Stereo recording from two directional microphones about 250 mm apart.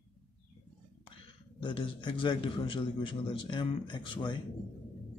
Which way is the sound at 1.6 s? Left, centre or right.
Centre.